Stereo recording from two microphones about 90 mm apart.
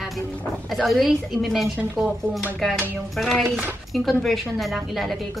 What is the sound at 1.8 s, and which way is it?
Speech, 10° right (ahead or behind).